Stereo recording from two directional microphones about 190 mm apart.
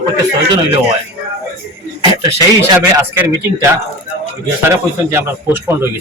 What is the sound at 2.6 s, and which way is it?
A man's voice, 15° right (ahead or behind).